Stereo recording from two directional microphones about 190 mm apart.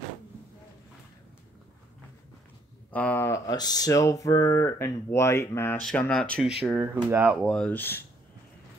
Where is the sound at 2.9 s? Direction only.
10° left (ahead or behind); by 7.3 s 10° right (ahead or behind).